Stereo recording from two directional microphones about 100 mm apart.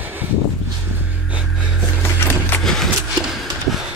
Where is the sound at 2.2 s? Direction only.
25° left (ahead or behind).